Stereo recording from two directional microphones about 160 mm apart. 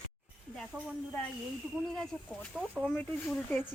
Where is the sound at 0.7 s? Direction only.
Centre (ahead or behind).